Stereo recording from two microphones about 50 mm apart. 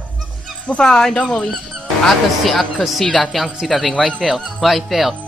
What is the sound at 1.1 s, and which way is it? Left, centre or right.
Speech, left.